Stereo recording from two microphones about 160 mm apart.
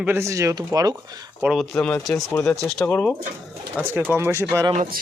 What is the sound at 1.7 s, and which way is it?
Speech, 10° left (ahead or behind).